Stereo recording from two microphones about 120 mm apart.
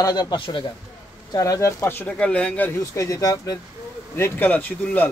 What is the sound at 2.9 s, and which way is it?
Speech, 25° left (ahead or behind).